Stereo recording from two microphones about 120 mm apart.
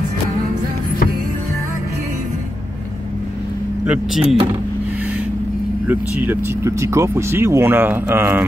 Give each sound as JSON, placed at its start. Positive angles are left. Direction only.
{"t": 3.8, "sound": "speech", "side_deg": -10}
{"t": 5.9, "sound": "speech", "side_deg": -20}